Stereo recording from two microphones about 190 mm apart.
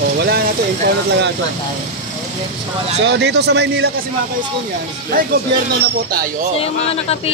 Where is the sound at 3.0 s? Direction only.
65° right (ahead or behind).